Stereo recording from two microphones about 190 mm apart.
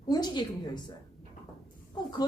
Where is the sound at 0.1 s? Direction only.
20° left (ahead or behind).